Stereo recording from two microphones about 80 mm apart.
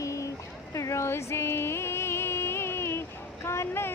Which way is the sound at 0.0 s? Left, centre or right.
Left.